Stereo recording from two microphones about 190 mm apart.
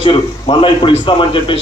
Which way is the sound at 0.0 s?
30° left (ahead or behind).